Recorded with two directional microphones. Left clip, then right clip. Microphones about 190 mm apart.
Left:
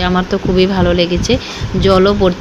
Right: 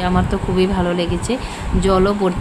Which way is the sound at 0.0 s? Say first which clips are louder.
Left 4 dB; 15° left (ahead or behind).